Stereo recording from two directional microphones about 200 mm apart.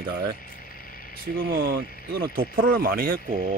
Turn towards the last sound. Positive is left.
turn(degrees=-45)  # may be behind; listen again after turning